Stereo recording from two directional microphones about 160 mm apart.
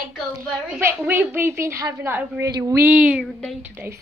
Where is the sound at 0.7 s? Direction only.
15° right (ahead or behind).